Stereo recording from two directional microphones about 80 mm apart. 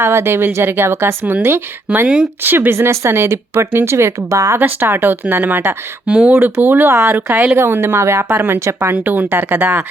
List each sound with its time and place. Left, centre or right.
0.0 s a woman's voice: right
4.6 s a woman's voice: right
7.3 s speech: centre
7.5 s a woman's voice: right